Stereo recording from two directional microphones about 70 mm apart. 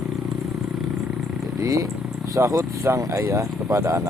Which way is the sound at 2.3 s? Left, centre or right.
Right.